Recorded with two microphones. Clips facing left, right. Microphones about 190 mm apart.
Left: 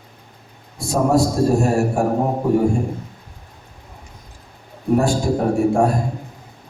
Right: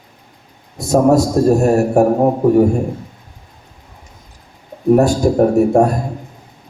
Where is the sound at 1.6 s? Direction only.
40° right (ahead or behind).